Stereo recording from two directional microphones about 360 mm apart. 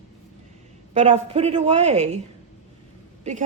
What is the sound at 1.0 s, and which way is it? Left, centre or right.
A woman's voice, centre.